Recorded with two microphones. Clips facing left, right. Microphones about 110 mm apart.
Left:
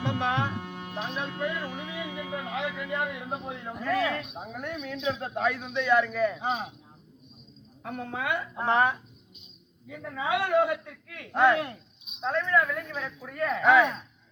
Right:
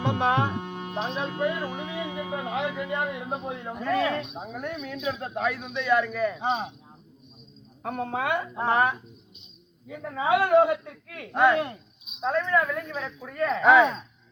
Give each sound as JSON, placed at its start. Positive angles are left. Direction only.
{"t": 0.0, "sound": "music", "side_deg": -20}
{"t": 2.3, "sound": "music", "side_deg": -25}
{"t": 2.7, "sound": "a man's voice", "side_deg": -15}
{"t": 4.3, "sound": "speech", "side_deg": 0}
{"t": 5.6, "sound": "a woman's voice", "side_deg": -15}
{"t": 6.4, "sound": "a man's voice", "side_deg": -25}
{"t": 7.8, "sound": "speech", "side_deg": -45}
{"t": 8.5, "sound": "a woman's voice", "side_deg": -10}
{"t": 9.9, "sound": "speech", "side_deg": -30}
{"t": 10.5, "sound": "a man's voice", "side_deg": -25}
{"t": 10.8, "sound": "speech", "side_deg": -45}
{"t": 12.2, "sound": "a woman's voice", "side_deg": -10}
{"t": 13.6, "sound": "a man's voice", "side_deg": -25}